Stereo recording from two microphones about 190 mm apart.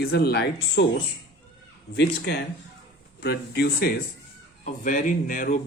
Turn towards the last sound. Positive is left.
turn(degrees=45)  # may be behind; listen again after turning